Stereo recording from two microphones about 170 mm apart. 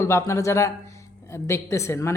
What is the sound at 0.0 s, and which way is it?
Speech, 15° left (ahead or behind).